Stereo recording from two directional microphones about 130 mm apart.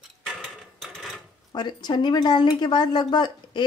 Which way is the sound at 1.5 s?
35° left (ahead or behind).